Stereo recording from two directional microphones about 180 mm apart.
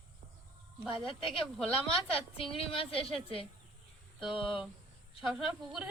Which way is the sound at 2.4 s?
30° left (ahead or behind).